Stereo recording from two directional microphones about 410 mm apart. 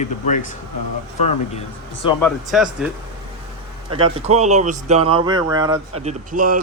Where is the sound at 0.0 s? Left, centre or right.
Centre.